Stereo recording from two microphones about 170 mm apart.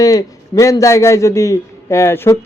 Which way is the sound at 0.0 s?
20° left (ahead or behind).